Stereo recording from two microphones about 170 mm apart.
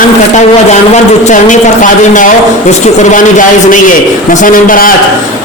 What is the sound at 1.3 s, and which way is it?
A man's voice, 50° left (ahead or behind).